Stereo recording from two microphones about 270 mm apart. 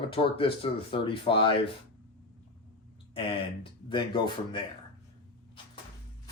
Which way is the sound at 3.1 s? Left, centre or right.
Centre.